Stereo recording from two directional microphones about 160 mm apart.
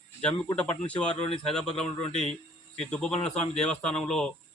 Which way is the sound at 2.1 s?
45° left (ahead or behind).